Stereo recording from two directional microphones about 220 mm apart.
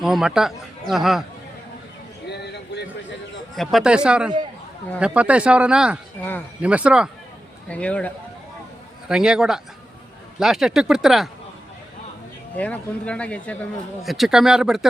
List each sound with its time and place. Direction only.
0.0 s speech: centre (ahead or behind)
2.2 s a sound: 50° left (ahead or behind)
3.5 s speech: centre (ahead or behind)
12.5 s speech: 5° left (ahead or behind)